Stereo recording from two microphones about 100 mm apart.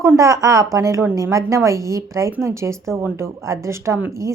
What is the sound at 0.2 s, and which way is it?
A woman's voice, 35° right (ahead or behind).